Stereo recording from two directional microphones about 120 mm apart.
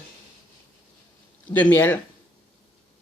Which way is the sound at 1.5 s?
15° left (ahead or behind).